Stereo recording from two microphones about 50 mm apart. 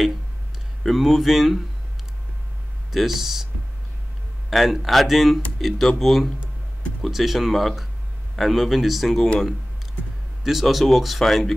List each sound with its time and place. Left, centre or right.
0.8 s speech: centre
2.9 s speech: centre
4.5 s speech: centre
10.4 s speech: centre